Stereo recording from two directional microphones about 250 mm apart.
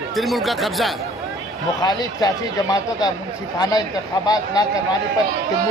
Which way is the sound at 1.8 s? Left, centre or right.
Centre.